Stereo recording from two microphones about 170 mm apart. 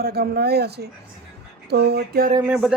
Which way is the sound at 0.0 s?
65° right (ahead or behind).